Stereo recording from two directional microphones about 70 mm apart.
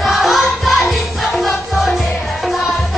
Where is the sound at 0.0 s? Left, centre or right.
Centre.